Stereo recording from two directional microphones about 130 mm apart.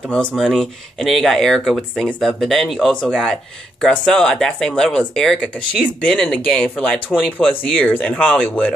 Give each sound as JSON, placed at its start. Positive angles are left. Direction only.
{"t": 0.1, "sound": "speech", "side_deg": 5}